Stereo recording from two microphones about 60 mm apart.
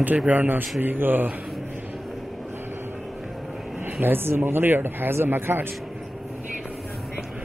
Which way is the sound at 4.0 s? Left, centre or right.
Right.